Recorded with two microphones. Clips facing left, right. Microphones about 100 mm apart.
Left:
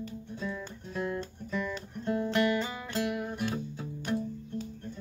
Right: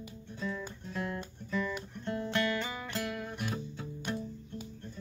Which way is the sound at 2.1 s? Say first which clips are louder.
Left 5 dB; 15° left (ahead or behind).